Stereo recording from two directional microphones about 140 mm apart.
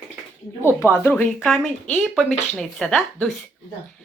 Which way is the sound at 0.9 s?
15° left (ahead or behind).